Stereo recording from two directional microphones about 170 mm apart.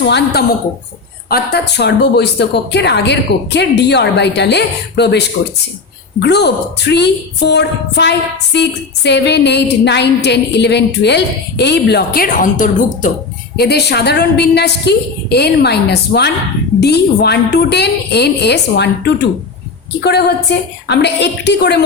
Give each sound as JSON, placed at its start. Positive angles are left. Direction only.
{"t": 0.0, "sound": "a woman's voice", "side_deg": 80}
{"t": 13.6, "sound": "a woman's voice", "side_deg": 75}
{"t": 20.0, "sound": "a woman's voice", "side_deg": 75}